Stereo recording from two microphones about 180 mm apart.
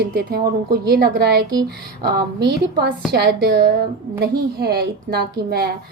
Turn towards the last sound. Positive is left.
turn(degrees=-60)  # may be behind; listen again after turning